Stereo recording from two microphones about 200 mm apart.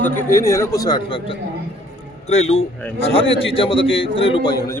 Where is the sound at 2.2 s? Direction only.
35° left (ahead or behind).